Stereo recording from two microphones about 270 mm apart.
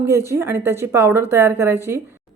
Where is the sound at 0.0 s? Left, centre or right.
Centre.